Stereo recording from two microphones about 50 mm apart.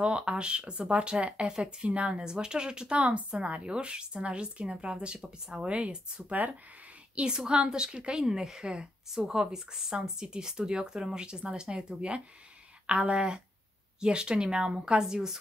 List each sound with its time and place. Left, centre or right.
0.0 s speech: centre